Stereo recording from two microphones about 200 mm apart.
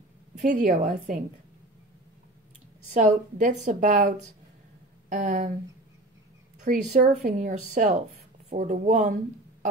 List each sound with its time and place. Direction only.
0.4 s a woman's voice: 35° right (ahead or behind)
2.9 s a woman's voice: 35° right (ahead or behind)
5.1 s a woman's voice: 40° right (ahead or behind)
6.6 s a woman's voice: 35° right (ahead or behind)